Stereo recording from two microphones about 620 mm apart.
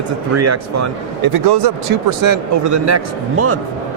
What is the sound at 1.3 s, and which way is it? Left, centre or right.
Speech, right.